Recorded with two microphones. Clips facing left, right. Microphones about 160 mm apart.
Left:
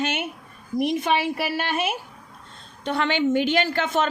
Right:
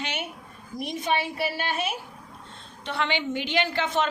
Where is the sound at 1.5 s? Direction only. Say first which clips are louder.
Left 4 dB; 75° left (ahead or behind).